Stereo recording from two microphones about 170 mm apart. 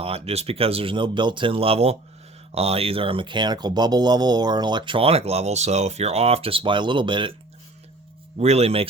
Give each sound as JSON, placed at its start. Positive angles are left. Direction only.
{"t": 0.0, "sound": "speech", "side_deg": -35}
{"t": 8.4, "sound": "speech", "side_deg": -40}